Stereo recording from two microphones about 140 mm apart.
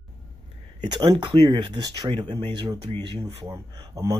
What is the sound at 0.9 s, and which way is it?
Speech, 35° right (ahead or behind).